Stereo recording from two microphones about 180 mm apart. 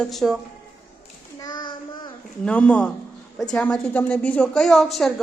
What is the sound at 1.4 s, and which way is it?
Child singing, 25° left (ahead or behind).